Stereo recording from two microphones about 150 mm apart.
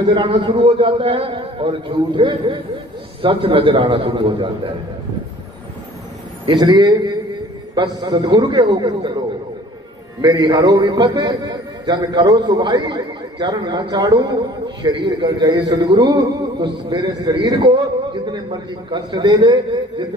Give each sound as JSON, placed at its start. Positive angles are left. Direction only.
{"t": 0.1, "sound": "a man's voice", "side_deg": -30}
{"t": 6.4, "sound": "a man's voice", "side_deg": -30}
{"t": 10.2, "sound": "a man's voice", "side_deg": -25}